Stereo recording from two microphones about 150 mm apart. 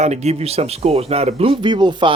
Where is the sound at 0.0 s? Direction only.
50° right (ahead or behind).